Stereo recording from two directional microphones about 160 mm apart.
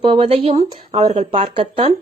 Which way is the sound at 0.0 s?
35° right (ahead or behind).